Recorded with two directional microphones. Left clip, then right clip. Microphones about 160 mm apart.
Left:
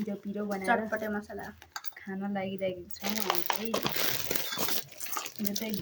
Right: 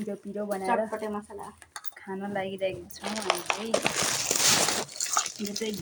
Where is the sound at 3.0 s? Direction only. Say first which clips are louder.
Right 1 dB; 15° left (ahead or behind).